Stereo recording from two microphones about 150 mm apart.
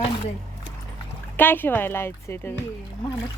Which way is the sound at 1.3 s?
15° left (ahead or behind).